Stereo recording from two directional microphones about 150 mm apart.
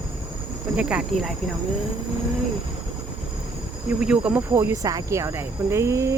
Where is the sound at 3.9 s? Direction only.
5° right (ahead or behind).